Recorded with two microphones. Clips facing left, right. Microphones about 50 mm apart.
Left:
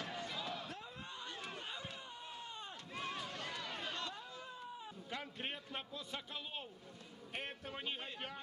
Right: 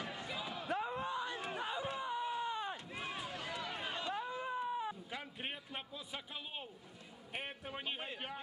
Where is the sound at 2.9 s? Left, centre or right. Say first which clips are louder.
Right 1 dB; centre.